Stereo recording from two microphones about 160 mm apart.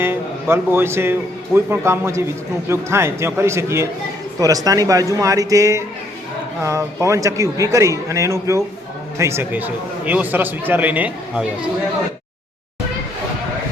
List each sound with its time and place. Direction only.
0.0 s a man's voice: 15° right (ahead or behind)